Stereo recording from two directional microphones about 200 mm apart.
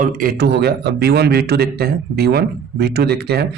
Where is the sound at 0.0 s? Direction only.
45° right (ahead or behind).